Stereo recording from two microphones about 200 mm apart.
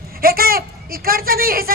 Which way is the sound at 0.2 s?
45° right (ahead or behind).